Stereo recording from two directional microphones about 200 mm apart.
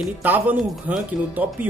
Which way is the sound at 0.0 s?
10° right (ahead or behind).